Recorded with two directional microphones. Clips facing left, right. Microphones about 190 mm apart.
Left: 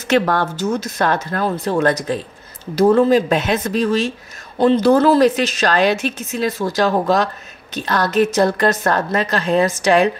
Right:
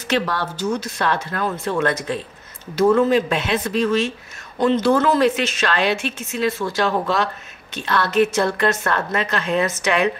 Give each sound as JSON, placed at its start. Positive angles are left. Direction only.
{"t": 0.1, "sound": "a woman's voice", "side_deg": 50}